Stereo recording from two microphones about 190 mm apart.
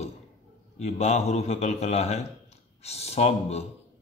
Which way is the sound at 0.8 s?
35° left (ahead or behind).